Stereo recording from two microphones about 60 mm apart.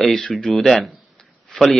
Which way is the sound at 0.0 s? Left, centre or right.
Centre.